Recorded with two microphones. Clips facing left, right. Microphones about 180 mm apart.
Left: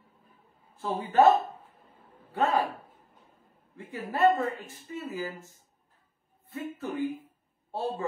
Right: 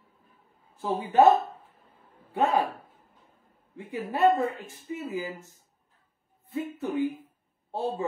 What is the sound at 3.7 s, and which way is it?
Speech, 20° right (ahead or behind).